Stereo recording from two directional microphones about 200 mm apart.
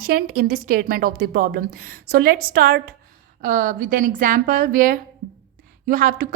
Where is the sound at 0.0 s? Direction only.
50° right (ahead or behind).